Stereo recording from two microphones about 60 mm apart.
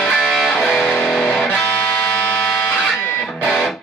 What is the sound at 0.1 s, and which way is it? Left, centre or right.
Music, centre.